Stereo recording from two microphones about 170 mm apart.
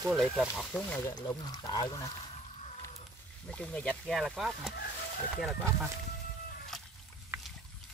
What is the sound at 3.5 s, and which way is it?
Speech, 5° left (ahead or behind).